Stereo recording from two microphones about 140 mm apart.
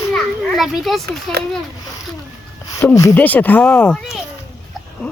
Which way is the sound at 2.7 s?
20° left (ahead or behind).